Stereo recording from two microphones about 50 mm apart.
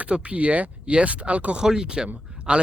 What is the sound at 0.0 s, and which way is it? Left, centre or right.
Speech, right.